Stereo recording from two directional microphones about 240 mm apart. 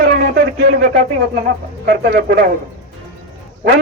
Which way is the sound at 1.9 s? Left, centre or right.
Right.